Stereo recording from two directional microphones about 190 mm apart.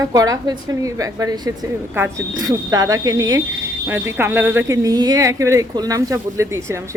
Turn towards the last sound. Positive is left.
turn(degrees=-15)  # may be behind; listen again after turning